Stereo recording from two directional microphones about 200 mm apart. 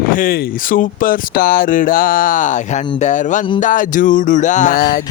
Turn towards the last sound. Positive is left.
turn(degrees=45)  # may be behind; listen again after turning